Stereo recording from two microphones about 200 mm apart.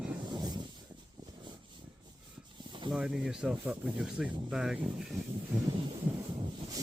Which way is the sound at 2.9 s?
5° right (ahead or behind).